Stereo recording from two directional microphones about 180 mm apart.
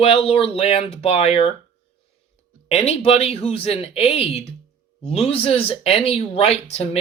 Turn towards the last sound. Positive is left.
turn(degrees=35)  # may be behind; listen again after turning